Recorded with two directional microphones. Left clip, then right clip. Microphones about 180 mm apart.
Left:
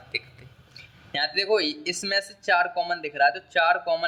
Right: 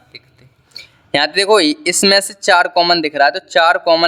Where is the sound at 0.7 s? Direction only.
50° right (ahead or behind).